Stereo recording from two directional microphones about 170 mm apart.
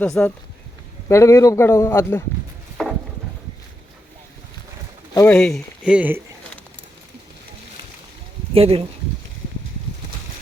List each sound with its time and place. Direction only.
0.0 s a man's voice: 10° left (ahead or behind)
2.8 s a sound: centre (ahead or behind)
5.1 s a man's voice: 10° left (ahead or behind)
5.8 s speech: 5° right (ahead or behind)
8.5 s speech: 35° right (ahead or behind)